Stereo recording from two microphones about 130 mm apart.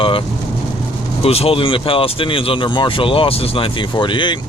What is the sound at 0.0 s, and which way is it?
Vehicle, 45° left (ahead or behind).